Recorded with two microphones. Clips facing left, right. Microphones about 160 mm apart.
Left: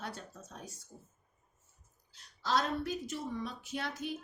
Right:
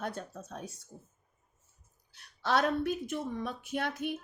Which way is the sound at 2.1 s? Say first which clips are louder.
Right 3 dB; 60° right (ahead or behind).